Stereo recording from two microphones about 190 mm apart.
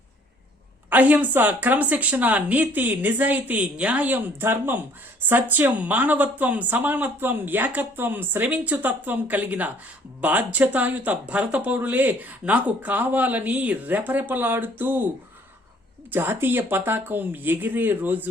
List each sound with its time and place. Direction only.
0.9 s speech: 10° right (ahead or behind)
16.1 s speech: 10° right (ahead or behind)